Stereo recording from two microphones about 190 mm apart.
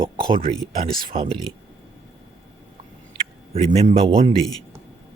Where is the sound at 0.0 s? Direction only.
25° right (ahead or behind).